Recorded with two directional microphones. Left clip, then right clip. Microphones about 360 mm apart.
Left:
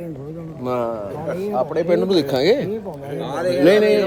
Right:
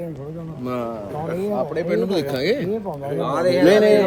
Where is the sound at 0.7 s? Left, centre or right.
Centre.